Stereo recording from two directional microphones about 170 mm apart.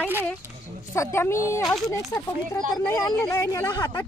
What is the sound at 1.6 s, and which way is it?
Speech, centre (ahead or behind).